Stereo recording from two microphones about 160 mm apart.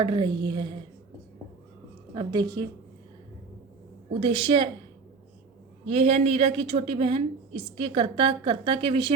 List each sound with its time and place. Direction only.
0.0 s a woman's voice: 30° right (ahead or behind)
2.1 s a woman's voice: 25° right (ahead or behind)
4.1 s a woman's voice: 35° right (ahead or behind)
5.9 s a woman's voice: 40° right (ahead or behind)